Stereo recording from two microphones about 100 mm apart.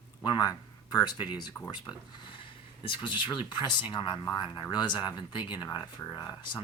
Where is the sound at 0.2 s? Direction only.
40° left (ahead or behind).